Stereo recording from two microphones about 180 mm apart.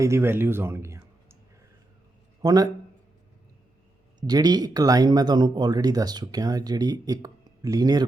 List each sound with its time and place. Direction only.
0.0 s speech: 15° right (ahead or behind)
2.4 s a man's voice: 20° right (ahead or behind)
4.3 s speech: 20° right (ahead or behind)